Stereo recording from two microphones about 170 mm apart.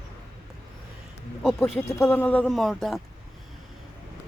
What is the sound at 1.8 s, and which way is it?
Speech, 20° left (ahead or behind).